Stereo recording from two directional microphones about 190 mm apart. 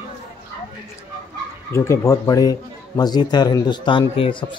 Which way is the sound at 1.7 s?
15° left (ahead or behind).